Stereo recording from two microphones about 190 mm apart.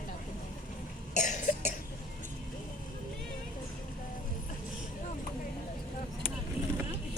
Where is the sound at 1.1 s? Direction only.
40° left (ahead or behind).